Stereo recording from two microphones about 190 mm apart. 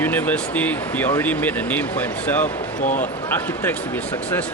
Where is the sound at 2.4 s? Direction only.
40° left (ahead or behind).